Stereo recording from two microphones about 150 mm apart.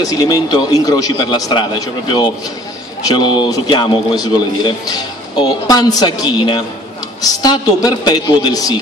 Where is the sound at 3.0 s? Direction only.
30° left (ahead or behind).